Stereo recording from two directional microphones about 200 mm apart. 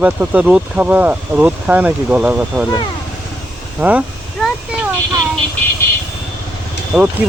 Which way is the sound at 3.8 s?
5° right (ahead or behind).